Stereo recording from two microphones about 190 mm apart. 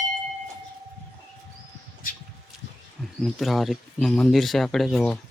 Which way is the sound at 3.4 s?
Centre (ahead or behind).